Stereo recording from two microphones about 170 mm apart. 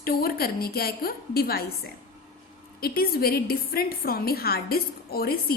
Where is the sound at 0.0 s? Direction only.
60° left (ahead or behind).